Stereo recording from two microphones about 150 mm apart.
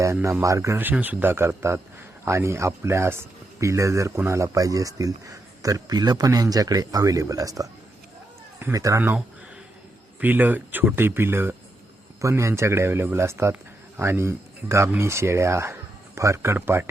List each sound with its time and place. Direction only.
0.0 s a man's voice: 20° right (ahead or behind)